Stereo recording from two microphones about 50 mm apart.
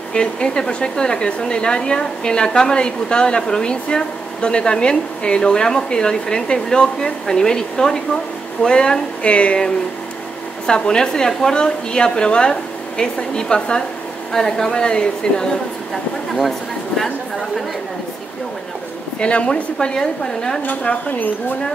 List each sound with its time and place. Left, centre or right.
0.1 s speech: centre
10.7 s speech: centre
15.9 s speech: centre
19.1 s speech: centre
20.6 s speech: left